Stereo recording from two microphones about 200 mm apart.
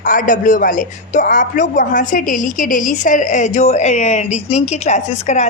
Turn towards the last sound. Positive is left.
turn(degrees=35)  # may be behind; listen again after turning